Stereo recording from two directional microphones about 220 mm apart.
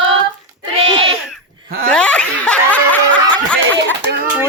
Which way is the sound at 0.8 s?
25° right (ahead or behind).